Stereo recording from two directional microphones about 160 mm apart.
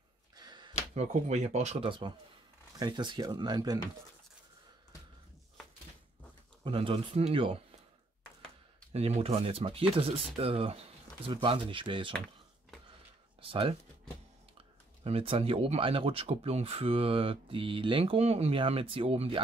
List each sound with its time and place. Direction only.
0.4 s a sound: 25° right (ahead or behind)
0.9 s speech: 45° right (ahead or behind); by 3.8 s 25° right (ahead or behind)
6.6 s speech: 35° right (ahead or behind)
8.9 s speech: 40° right (ahead or behind)
13.4 s speech: 35° right (ahead or behind)
15.0 s speech: 35° right (ahead or behind)